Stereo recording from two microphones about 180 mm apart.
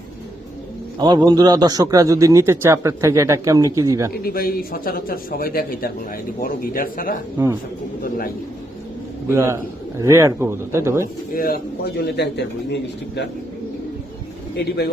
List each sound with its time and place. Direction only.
0.9 s a man's voice: 25° right (ahead or behind)
4.2 s a man's voice: 55° left (ahead or behind)
7.3 s a man's voice: 15° right (ahead or behind)
9.3 s a man's voice: 15° right (ahead or behind)
11.0 s a man's voice: 50° left (ahead or behind); by 13.2 s 70° left (ahead or behind)